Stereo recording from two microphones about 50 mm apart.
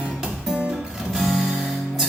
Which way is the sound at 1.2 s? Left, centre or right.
Centre.